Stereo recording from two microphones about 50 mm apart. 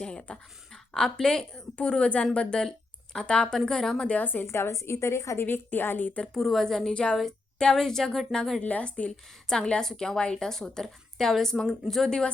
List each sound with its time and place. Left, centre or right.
0.0 s a woman's voice: centre
4.2 s a woman's voice: left
4.4 s a woman's voice: left
5.4 s a woman's voice: left
6.3 s a woman's voice: centre
6.9 s a woman's voice: left
8.6 s a woman's voice: left